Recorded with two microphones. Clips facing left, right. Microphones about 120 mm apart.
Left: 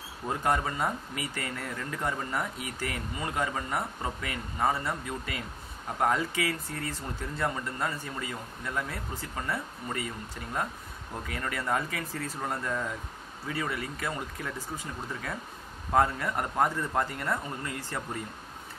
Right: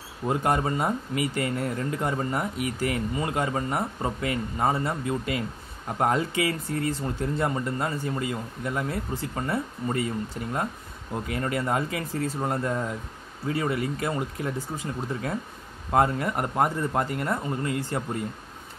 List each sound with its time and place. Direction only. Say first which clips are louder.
0.3 s speech: right 4 dB; 20° right (ahead or behind)
15.9 s speech: right 3 dB; 20° right (ahead or behind)